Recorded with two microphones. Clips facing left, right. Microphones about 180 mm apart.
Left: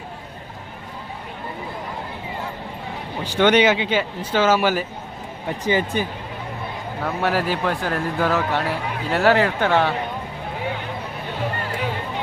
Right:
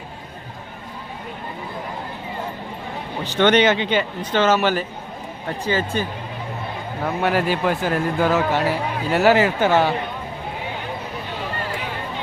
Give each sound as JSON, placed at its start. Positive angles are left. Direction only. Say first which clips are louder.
{"t": 3.2, "sound": "speech", "louder": "even", "side_deg": 10}
{"t": 7.0, "sound": "speech", "louder": "right 2 dB", "side_deg": 0}